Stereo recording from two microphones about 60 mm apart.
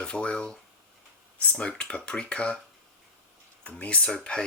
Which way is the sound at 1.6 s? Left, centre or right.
Centre.